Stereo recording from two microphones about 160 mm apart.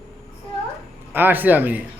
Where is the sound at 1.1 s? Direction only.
10° right (ahead or behind).